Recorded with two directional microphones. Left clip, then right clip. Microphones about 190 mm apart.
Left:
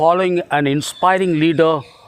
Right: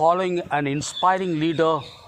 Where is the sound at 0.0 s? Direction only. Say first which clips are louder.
Left 5 dB; 45° left (ahead or behind).